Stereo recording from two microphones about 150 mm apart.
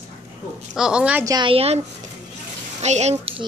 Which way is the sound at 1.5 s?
40° right (ahead or behind).